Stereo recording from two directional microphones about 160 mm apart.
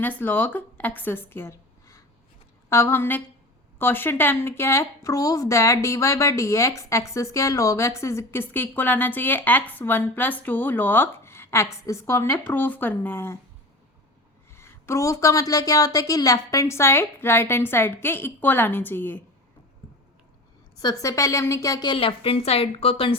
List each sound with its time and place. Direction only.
0.0 s a woman's voice: 10° left (ahead or behind)
14.5 s speech: 15° left (ahead or behind)
20.7 s a woman's voice: 20° left (ahead or behind)